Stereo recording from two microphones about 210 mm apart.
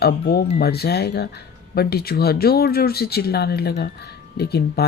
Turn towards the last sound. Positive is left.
turn(degrees=50)  # may be behind; listen again after turning